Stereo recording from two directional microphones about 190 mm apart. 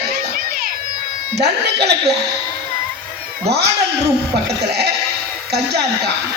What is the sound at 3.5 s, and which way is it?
Speech, 60° right (ahead or behind).